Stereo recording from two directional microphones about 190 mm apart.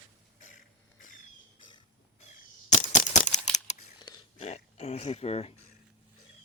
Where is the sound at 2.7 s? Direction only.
40° left (ahead or behind).